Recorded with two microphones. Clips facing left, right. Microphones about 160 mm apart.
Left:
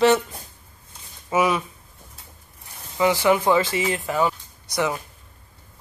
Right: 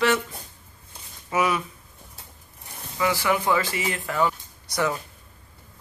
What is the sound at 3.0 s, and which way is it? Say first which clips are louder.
Speech: left 5 dB; 25° left (ahead or behind).